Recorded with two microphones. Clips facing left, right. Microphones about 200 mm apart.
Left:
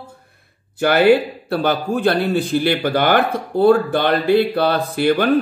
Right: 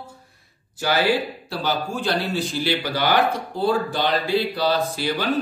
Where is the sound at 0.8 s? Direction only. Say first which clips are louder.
Left 8 dB; 60° left (ahead or behind).